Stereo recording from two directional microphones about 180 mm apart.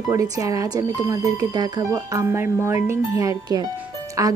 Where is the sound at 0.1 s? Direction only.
20° right (ahead or behind).